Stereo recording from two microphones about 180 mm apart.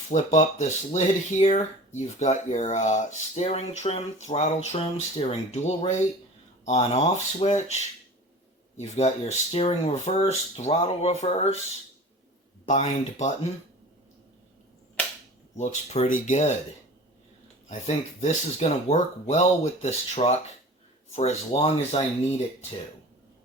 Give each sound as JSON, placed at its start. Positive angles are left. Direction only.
{"t": 0.1, "sound": "speech", "side_deg": 40}
{"t": 12.6, "sound": "speech", "side_deg": 40}
{"t": 15.5, "sound": "speech", "side_deg": 40}
{"t": 17.7, "sound": "speech", "side_deg": 40}